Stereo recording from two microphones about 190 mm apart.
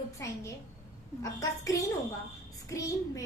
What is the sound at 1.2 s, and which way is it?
A woman's voice, 15° left (ahead or behind).